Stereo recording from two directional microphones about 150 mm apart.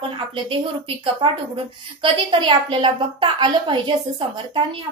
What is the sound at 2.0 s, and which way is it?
A woman's voice, 35° right (ahead or behind).